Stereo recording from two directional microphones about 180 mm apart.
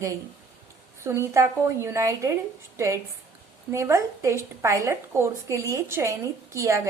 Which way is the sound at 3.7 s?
15° right (ahead or behind).